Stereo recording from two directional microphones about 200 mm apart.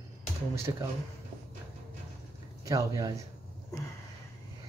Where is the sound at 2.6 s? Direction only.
15° right (ahead or behind).